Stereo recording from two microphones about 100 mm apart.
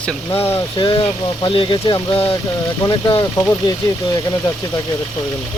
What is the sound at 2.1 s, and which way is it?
Speech, 65° left (ahead or behind).